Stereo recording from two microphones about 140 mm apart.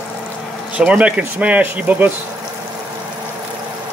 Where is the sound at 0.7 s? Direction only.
10° right (ahead or behind).